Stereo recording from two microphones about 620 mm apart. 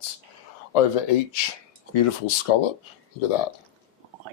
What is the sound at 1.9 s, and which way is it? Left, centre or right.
Speech, left.